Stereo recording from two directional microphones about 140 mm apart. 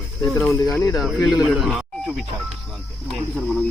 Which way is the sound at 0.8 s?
25° left (ahead or behind).